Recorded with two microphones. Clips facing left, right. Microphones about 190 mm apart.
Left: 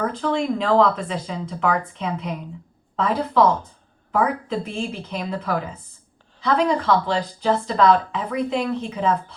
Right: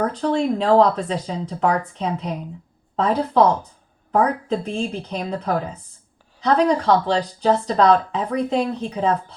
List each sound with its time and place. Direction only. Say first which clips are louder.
0.0 s speech: right 2 dB; 35° right (ahead or behind)